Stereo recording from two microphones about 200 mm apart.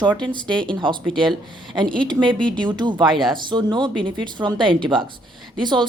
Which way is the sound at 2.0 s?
25° right (ahead or behind).